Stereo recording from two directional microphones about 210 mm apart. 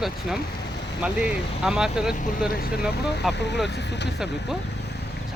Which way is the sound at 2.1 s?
40° left (ahead or behind).